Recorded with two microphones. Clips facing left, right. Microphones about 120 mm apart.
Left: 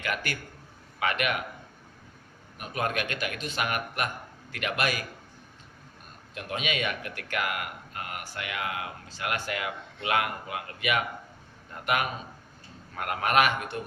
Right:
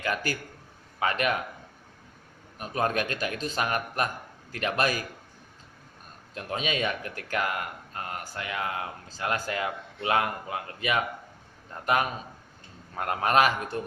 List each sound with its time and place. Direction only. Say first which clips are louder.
0.0 s a man's voice: right 3 dB; 35° right (ahead or behind)
2.6 s speech: right 3 dB; 35° right (ahead or behind)
6.3 s speech: right 1 dB; 35° right (ahead or behind)
13.0 s speech: right 2 dB; 30° right (ahead or behind)